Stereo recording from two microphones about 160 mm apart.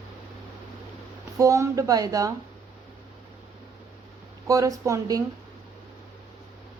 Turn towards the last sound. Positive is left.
turn(degrees=-20)  # may be behind; listen again after turning